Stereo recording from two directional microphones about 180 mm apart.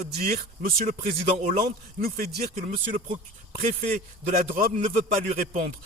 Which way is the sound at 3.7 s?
40° right (ahead or behind).